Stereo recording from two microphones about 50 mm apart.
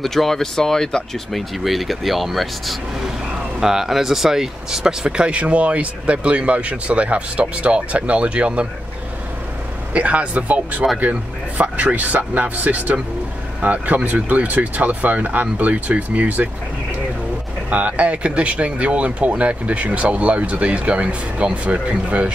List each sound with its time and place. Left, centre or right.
0.0 s speech: centre
1.6 s speech: centre; by 8.6 s right
9.9 s speech: right
17.6 s speech: right